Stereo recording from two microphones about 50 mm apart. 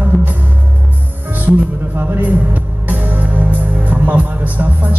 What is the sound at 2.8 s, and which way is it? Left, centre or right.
Music, right.